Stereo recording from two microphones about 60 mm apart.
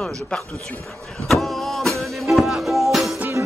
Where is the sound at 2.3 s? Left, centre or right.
Centre.